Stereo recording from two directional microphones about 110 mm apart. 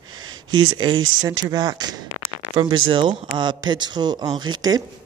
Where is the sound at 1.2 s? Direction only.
35° right (ahead or behind).